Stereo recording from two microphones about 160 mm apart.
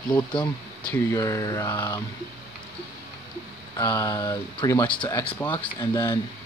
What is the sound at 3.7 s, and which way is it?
Speech, 20° left (ahead or behind).